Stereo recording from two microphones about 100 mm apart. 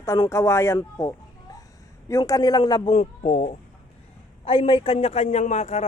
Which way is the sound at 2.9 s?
90° left.